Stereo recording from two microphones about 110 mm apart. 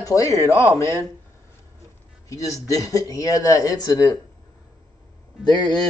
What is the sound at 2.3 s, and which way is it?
Speech, 30° left (ahead or behind).